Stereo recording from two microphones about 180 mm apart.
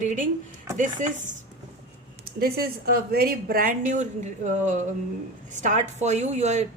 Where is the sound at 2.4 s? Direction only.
55° right (ahead or behind).